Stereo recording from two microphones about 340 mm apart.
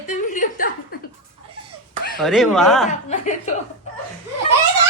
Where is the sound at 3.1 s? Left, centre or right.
Left.